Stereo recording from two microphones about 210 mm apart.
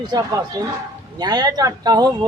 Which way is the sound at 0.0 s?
20° right (ahead or behind).